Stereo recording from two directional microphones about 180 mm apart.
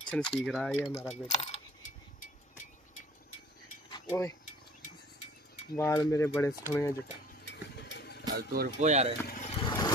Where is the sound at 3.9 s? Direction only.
15° left (ahead or behind).